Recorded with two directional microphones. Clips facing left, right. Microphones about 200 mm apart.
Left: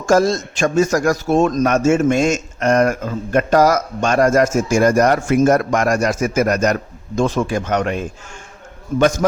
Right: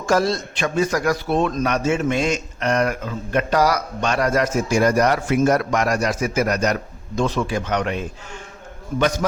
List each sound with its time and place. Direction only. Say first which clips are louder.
0.0 s a man's voice: left 5 dB; 45° left (ahead or behind)